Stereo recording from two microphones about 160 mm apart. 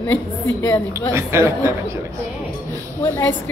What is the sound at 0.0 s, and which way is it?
Speech, 10° left (ahead or behind).